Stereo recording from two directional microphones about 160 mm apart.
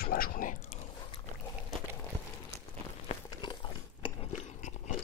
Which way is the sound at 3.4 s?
30° left (ahead or behind).